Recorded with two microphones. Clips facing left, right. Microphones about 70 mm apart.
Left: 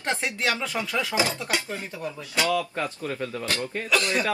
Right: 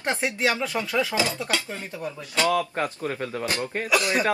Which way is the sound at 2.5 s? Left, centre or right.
Right.